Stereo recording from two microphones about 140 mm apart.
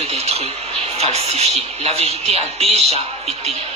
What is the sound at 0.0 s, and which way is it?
A woman's voice, 50° right (ahead or behind).